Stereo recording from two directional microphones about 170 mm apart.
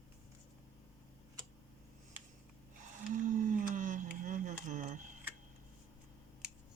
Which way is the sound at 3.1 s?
50° right (ahead or behind).